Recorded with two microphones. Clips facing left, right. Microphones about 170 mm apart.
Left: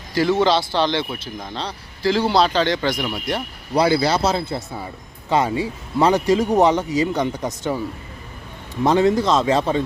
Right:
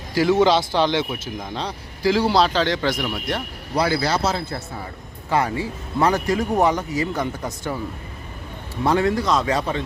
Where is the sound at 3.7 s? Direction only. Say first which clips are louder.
Left 4 dB; 20° left (ahead or behind).